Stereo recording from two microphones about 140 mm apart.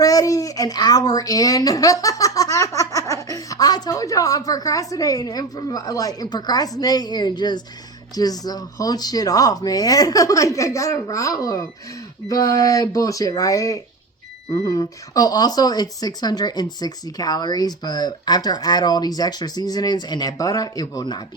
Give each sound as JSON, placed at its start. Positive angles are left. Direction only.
{"t": 0.0, "sound": "a child's voice", "side_deg": 25}